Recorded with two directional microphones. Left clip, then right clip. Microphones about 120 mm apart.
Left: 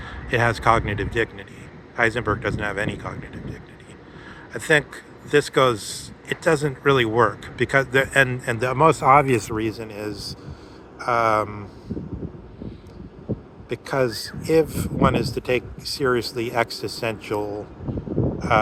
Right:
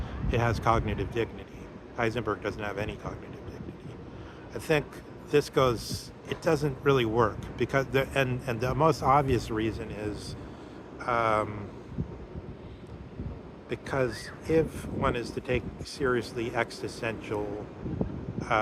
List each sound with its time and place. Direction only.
0.0 s speech: 25° left (ahead or behind)
4.5 s speech: 25° left (ahead or behind)
9.6 s speech: 45° left (ahead or behind)
13.7 s speech: 60° left (ahead or behind)